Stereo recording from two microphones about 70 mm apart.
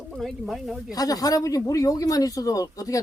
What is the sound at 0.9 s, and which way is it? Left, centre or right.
Speech, left.